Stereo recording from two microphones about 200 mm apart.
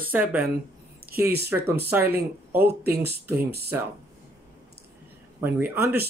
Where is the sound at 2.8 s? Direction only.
55° right (ahead or behind).